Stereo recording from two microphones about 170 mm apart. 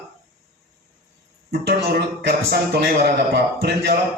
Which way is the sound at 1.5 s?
65° right (ahead or behind).